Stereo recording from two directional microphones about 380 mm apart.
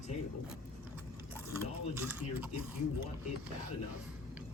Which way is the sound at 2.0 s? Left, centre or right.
Centre.